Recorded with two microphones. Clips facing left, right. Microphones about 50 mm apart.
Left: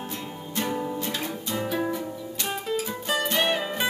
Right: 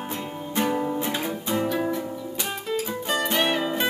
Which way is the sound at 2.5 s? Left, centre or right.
Centre.